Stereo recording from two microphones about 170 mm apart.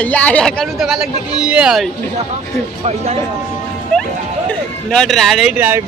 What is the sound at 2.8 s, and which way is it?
Speech, 35° right (ahead or behind).